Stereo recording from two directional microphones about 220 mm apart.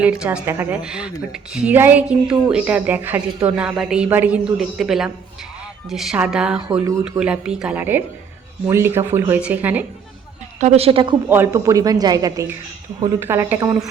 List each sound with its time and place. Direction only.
0.0 s a woman's voice: 5° right (ahead or behind)
10.6 s a woman's voice: 30° right (ahead or behind)
11.3 s speech: 10° right (ahead or behind)